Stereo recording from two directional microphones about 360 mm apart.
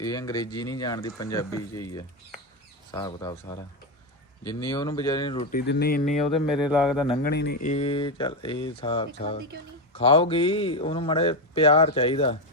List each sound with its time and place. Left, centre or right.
0.0 s speech: centre
6.3 s speech: centre
7.1 s speech: left